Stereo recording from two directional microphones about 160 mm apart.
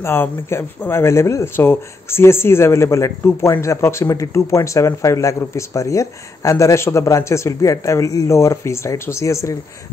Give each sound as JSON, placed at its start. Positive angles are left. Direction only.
{"t": 0.0, "sound": "speech", "side_deg": 15}